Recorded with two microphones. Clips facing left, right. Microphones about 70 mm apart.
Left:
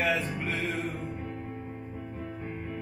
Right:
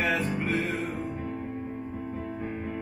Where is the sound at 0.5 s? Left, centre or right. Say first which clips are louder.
Right 3 dB; right.